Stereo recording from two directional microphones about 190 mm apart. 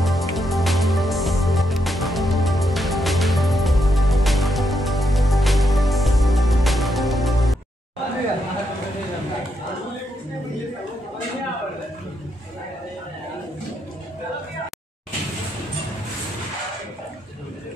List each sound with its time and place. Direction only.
0.0 s music: centre (ahead or behind)